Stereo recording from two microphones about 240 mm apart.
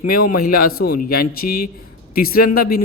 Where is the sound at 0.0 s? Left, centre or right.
Left.